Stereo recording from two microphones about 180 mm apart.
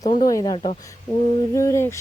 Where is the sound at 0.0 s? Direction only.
20° left (ahead or behind).